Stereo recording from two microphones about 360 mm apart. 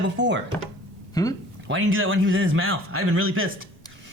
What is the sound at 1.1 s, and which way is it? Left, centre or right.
Speech, centre.